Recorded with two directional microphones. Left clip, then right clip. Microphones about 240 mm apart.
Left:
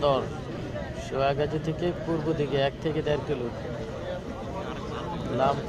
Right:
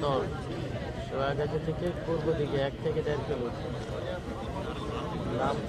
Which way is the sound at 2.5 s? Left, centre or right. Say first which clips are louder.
Left 3 dB; left.